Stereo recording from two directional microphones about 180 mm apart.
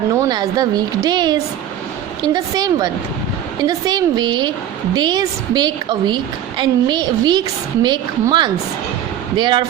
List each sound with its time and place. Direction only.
0.1 s a woman's voice: 20° right (ahead or behind)